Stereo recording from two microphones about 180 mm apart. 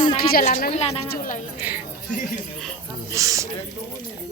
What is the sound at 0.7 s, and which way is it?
Speech, 35° left (ahead or behind).